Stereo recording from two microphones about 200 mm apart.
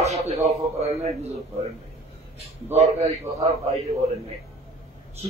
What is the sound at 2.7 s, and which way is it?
Speech, 30° right (ahead or behind).